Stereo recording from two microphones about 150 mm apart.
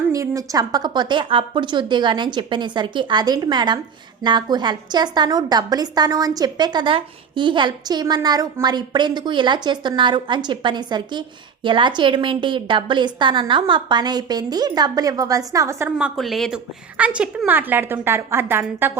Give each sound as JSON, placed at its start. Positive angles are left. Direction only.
{"t": 0.1, "sound": "a woman's voice", "side_deg": -20}
{"t": 16.0, "sound": "a woman's voice", "side_deg": -5}